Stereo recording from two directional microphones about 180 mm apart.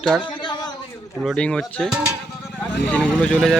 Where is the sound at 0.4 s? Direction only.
25° left (ahead or behind).